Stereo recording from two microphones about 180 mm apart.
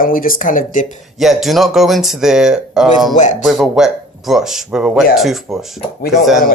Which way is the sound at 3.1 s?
40° left (ahead or behind).